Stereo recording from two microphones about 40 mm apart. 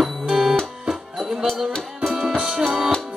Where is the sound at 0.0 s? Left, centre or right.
Centre.